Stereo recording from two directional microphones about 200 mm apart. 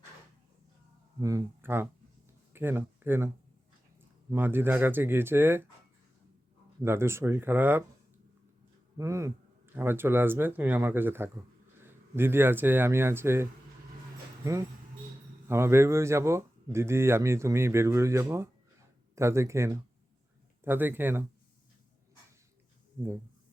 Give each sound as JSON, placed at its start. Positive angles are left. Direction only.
{"t": 1.2, "sound": "speech", "side_deg": -15}
{"t": 4.3, "sound": "speech", "side_deg": -10}
{"t": 6.8, "sound": "speech", "side_deg": -10}
{"t": 9.0, "sound": "speech", "side_deg": -15}